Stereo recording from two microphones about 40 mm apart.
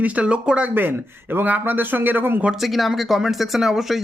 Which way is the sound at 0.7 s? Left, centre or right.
Right.